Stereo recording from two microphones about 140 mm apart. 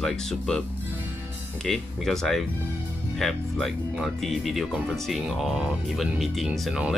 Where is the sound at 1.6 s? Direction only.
5° left (ahead or behind).